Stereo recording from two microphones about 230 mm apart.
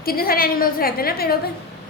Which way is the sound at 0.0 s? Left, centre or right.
Left.